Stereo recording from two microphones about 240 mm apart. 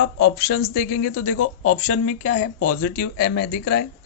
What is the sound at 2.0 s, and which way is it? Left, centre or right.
Speech, left.